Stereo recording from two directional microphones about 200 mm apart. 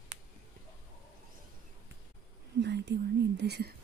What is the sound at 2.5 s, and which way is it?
Whispering, 60° right (ahead or behind).